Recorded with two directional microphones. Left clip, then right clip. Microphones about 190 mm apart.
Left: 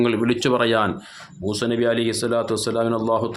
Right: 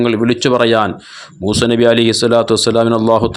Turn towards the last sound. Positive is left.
turn(degrees=-40)  # may be behind; listen again after turning